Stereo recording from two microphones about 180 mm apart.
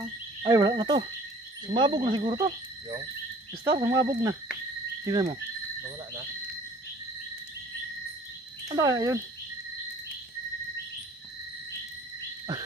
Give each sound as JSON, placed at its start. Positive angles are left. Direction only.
{"t": 0.4, "sound": "speech", "side_deg": -20}
{"t": 3.6, "sound": "speech", "side_deg": -20}
{"t": 8.7, "sound": "speech", "side_deg": -20}